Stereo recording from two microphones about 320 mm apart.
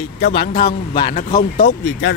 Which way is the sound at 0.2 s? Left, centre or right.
Left.